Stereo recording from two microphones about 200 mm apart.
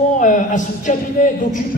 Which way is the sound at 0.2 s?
40° left (ahead or behind).